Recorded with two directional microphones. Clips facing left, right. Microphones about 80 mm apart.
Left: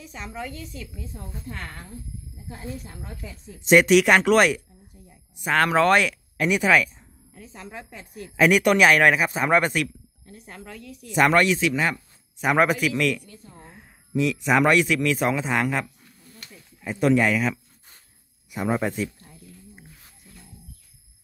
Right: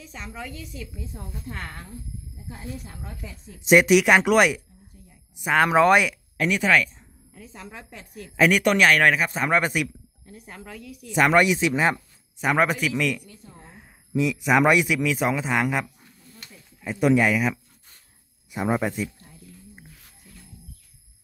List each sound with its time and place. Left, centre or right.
0.0 s speech: centre
6.4 s speech: centre
11.3 s speech: centre
12.4 s a man's voice: centre